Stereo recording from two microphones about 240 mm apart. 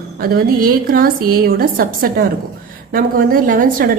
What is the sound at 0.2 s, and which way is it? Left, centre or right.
A woman's voice, right.